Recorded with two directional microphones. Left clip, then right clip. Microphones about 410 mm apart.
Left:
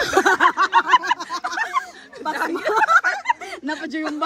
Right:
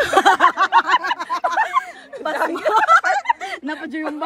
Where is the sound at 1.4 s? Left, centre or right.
Centre.